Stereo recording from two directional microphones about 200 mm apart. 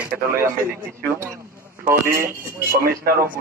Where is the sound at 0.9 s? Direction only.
10° right (ahead or behind).